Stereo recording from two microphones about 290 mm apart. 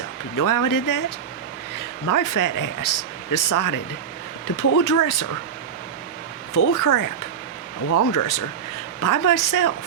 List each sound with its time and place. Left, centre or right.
0.3 s a woman's voice: left
6.7 s a woman's voice: left